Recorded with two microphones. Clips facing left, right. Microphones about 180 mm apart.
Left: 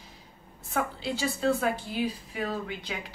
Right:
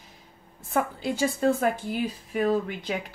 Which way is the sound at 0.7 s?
50° right (ahead or behind).